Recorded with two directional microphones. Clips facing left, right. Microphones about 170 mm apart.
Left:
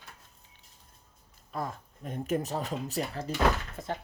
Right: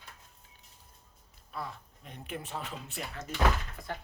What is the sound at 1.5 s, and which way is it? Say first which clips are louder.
Speech: left 5 dB; 45° left (ahead or behind).